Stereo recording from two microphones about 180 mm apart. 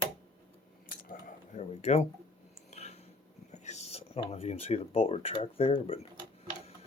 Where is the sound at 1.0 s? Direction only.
50° left (ahead or behind).